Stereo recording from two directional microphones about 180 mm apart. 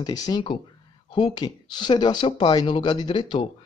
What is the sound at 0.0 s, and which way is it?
Speech, 20° left (ahead or behind).